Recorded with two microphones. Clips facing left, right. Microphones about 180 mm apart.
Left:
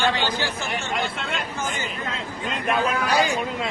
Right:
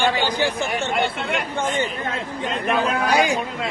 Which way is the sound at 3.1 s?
15° right (ahead or behind).